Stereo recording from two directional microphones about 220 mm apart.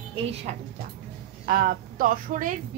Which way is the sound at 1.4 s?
40° right (ahead or behind).